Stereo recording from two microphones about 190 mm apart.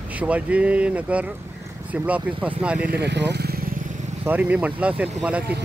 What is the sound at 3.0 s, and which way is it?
Speech, 65° right (ahead or behind).